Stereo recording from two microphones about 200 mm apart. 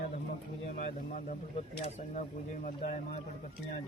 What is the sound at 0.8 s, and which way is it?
Speech, 40° left (ahead or behind).